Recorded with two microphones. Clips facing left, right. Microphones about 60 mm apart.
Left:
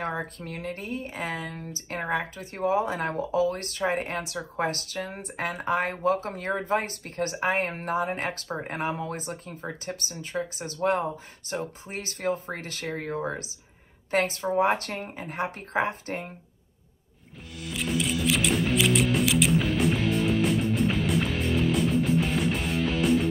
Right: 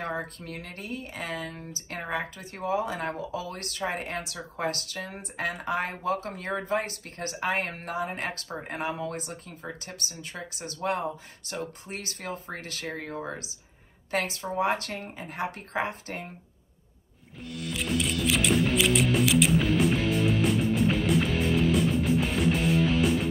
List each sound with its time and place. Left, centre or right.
0.0 s speech: left
17.6 s music: centre